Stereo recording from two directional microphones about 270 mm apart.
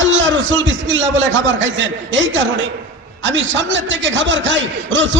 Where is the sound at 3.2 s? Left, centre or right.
Right.